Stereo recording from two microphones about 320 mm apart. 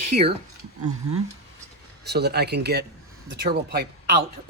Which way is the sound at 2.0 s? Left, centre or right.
Right.